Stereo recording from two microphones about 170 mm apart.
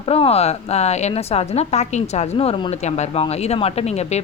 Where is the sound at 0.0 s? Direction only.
35° left (ahead or behind).